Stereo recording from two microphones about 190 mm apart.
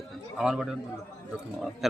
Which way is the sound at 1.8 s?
Centre (ahead or behind).